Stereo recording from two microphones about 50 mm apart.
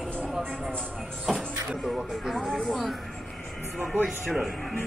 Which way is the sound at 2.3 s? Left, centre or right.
Centre.